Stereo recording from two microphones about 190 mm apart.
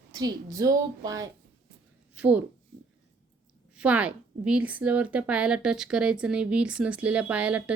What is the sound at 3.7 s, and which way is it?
A woman's voice, 5° right (ahead or behind).